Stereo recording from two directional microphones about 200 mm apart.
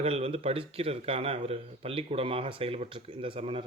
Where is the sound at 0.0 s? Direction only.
30° right (ahead or behind).